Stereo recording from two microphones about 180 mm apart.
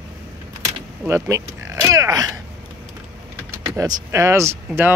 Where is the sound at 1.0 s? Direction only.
15° right (ahead or behind).